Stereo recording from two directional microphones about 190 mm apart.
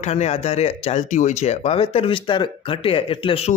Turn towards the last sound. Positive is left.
turn(degrees=30)  # may be behind; listen again after turning